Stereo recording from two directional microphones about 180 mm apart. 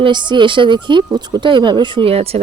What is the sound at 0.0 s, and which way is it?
A woman's voice, 25° right (ahead or behind).